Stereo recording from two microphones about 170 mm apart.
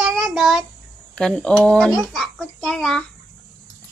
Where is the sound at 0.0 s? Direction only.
5° right (ahead or behind).